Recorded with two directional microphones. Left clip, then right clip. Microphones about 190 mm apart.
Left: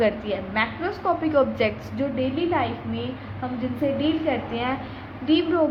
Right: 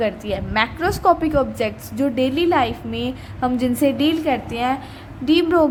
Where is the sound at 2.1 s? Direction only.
50° right (ahead or behind).